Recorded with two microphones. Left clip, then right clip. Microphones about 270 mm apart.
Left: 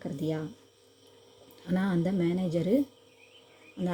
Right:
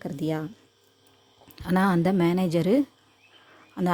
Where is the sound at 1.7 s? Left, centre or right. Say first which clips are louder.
Right 8 dB; right.